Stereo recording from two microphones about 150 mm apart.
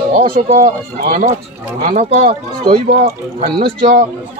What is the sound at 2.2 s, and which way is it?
Speech, 35° right (ahead or behind).